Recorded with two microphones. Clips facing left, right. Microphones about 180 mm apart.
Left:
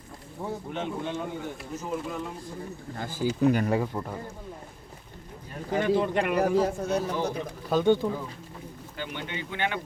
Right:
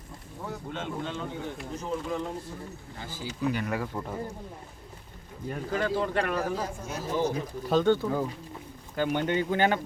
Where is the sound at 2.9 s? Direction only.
50° left (ahead or behind).